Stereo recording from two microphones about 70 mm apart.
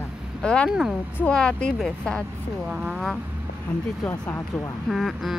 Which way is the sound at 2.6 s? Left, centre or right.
Centre.